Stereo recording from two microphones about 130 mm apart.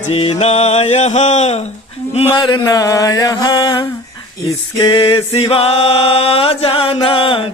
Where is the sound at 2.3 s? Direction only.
35° left (ahead or behind).